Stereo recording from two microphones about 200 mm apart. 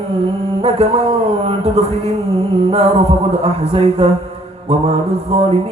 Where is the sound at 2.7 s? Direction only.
30° right (ahead or behind).